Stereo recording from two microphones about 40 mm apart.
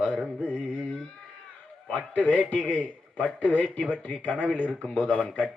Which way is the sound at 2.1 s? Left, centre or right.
Left.